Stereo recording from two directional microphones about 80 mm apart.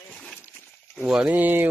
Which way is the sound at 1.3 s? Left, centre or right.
Right.